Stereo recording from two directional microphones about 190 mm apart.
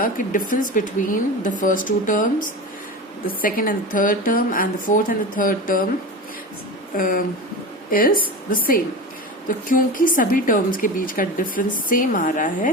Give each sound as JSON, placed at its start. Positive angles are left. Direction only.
{"t": 0.0, "sound": "a woman's voice", "side_deg": 45}
{"t": 6.9, "sound": "a woman's voice", "side_deg": 45}